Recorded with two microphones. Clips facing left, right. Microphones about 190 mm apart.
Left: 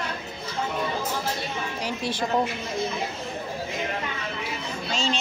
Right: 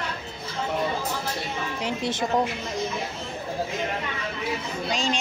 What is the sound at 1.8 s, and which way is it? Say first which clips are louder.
Speech: right 2 dB; 20° right (ahead or behind).